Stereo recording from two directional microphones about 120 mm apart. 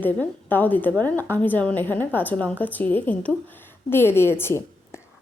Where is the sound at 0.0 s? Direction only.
15° left (ahead or behind).